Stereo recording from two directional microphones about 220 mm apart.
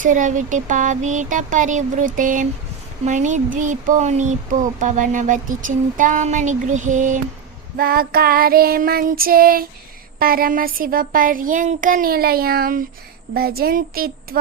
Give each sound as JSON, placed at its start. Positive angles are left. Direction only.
{"t": 0.0, "sound": "speech", "side_deg": -35}
{"t": 7.8, "sound": "child singing", "side_deg": -40}
{"t": 10.2, "sound": "speech", "side_deg": -40}
{"t": 13.3, "sound": "child singing", "side_deg": -45}